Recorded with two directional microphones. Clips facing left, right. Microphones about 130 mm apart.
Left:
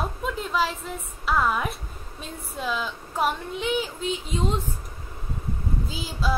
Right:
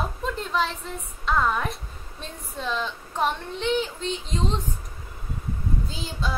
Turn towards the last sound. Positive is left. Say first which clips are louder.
# left 2 dB
turn(degrees=5)  # may be behind; listen again after turning